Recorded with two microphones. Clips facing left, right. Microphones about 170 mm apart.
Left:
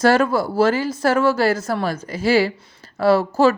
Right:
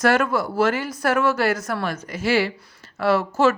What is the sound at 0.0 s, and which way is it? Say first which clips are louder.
A woman's voice: left 3 dB; 30° left (ahead or behind).